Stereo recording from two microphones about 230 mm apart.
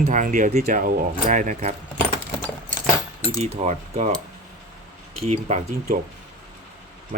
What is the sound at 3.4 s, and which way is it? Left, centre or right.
Speech, right.